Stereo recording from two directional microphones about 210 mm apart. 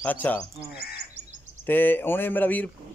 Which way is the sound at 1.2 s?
30° right (ahead or behind).